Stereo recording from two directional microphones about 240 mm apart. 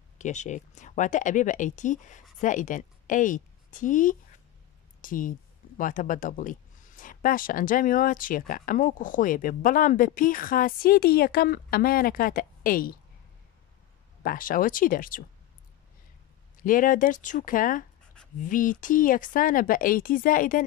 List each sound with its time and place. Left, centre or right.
0.2 s a woman's voice: left
14.2 s speech: left
16.6 s speech: left